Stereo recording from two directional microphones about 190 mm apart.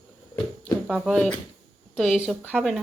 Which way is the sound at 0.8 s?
Centre (ahead or behind).